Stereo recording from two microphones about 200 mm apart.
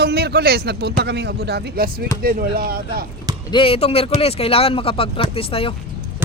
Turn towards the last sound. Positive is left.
turn(degrees=30)  # may be behind; listen again after turning